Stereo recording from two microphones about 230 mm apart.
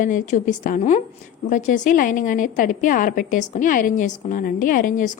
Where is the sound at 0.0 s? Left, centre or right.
Left.